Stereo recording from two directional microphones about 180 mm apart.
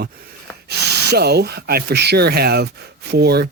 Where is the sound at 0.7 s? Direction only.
65° right (ahead or behind).